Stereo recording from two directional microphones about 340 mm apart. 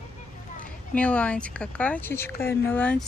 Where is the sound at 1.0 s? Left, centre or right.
Centre.